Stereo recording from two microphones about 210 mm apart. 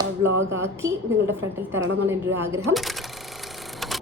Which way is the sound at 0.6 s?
10° right (ahead or behind).